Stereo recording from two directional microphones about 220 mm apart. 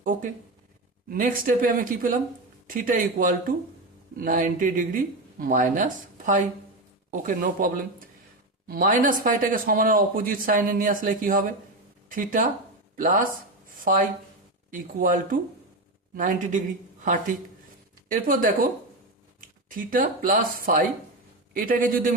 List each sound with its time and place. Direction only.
1.1 s speech: 40° right (ahead or behind)